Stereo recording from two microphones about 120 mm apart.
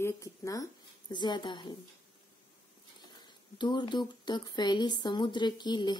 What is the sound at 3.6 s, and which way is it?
Speech, 40° left (ahead or behind).